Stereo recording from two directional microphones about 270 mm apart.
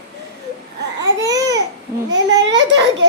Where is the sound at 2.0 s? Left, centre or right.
Right.